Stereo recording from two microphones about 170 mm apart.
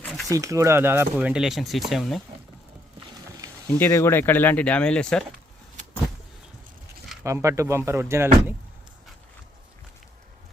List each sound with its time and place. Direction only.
0.0 s a sound: centre (ahead or behind)
0.3 s speech: 20° right (ahead or behind); by 2.2 s centre (ahead or behind)
3.7 s speech: 15° left (ahead or behind)
7.3 s speech: 15° right (ahead or behind)